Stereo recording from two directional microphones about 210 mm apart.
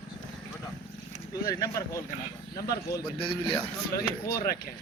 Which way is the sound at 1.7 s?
15° left (ahead or behind).